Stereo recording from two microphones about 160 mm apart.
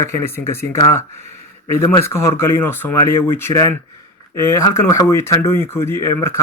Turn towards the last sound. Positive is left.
turn(degrees=15)  # may be behind; listen again after turning